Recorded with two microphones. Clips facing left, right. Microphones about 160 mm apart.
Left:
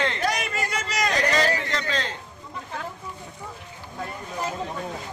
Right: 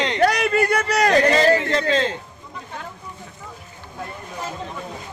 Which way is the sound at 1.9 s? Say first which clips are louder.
Right 10 dB; 20° right (ahead or behind).